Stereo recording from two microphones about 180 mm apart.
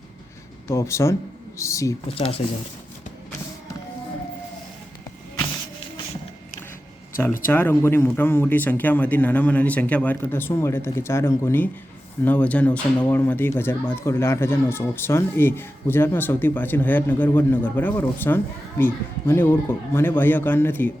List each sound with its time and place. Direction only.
0.7 s speech: 15° left (ahead or behind)
2.0 s speech: 30° left (ahead or behind)
7.4 s speech: 10° left (ahead or behind)